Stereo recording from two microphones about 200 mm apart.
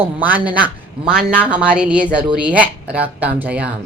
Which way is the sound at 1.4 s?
5° right (ahead or behind).